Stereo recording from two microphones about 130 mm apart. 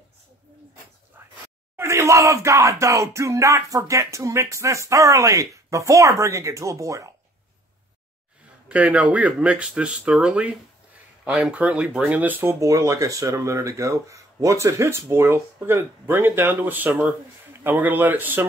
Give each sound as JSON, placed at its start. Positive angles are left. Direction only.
{"t": 1.8, "sound": "speech", "side_deg": -20}
{"t": 8.6, "sound": "speech", "side_deg": -10}